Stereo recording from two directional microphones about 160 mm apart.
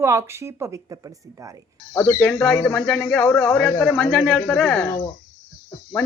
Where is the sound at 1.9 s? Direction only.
15° left (ahead or behind).